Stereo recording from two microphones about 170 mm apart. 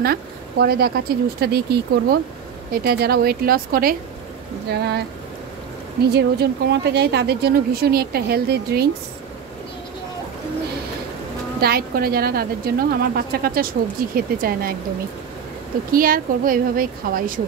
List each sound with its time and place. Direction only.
0.0 s a woman's voice: 65° right (ahead or behind)
4.6 s a woman's voice: 75° right (ahead or behind)
6.0 s a woman's voice: 75° right (ahead or behind)
11.6 s a woman's voice: 65° right (ahead or behind)
15.9 s a woman's voice: 55° right (ahead or behind)